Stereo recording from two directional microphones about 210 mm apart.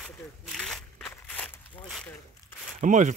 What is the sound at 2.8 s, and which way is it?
Speech, 35° right (ahead or behind).